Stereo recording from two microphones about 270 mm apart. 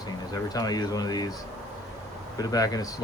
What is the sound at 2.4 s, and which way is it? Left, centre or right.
Speech, centre.